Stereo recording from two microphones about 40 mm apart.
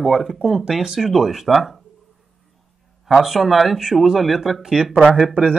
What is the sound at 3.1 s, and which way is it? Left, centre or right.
Speech, centre.